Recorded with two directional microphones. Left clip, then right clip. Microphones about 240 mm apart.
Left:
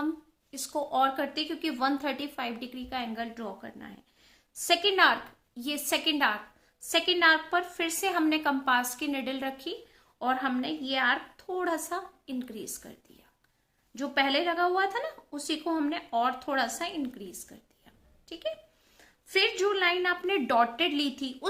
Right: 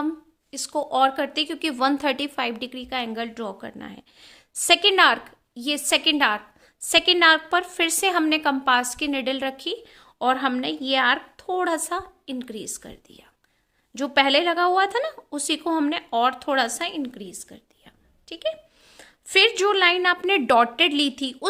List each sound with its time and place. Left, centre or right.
0.5 s a woman's voice: right